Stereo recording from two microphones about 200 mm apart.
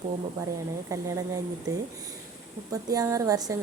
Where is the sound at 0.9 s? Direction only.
15° right (ahead or behind).